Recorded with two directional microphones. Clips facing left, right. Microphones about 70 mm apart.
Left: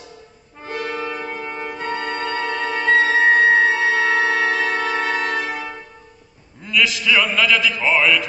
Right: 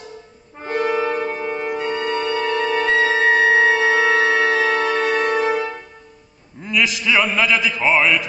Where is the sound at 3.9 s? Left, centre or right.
Centre.